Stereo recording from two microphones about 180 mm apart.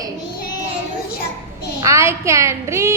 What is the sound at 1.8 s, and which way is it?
A woman's voice, 15° right (ahead or behind).